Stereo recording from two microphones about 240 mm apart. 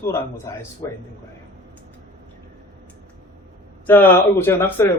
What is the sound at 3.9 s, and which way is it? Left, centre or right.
A man's voice, centre.